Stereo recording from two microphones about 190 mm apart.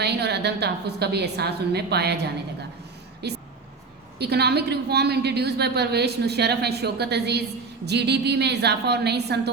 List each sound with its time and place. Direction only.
0.0 s a woman's voice: 60° right (ahead or behind)
3.2 s a sound: 60° right (ahead or behind)
4.2 s a woman's voice: 60° right (ahead or behind)